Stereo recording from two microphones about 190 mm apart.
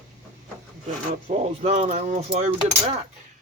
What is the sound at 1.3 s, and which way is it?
Speech, 35° right (ahead or behind).